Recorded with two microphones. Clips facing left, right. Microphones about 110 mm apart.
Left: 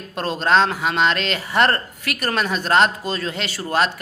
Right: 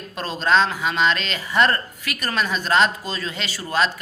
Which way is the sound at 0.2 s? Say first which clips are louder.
Left 2 dB; 55° left (ahead or behind).